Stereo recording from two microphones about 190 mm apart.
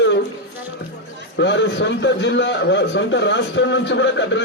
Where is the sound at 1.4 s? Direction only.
70° left (ahead or behind).